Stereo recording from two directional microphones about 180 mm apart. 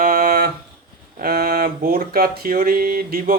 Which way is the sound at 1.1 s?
55° right (ahead or behind).